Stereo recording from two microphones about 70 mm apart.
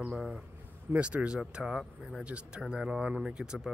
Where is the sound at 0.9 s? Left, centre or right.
Centre.